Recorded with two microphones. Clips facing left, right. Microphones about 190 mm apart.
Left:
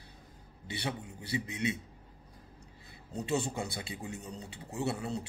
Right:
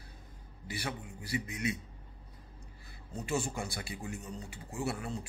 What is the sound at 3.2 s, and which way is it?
Speech, 20° left (ahead or behind).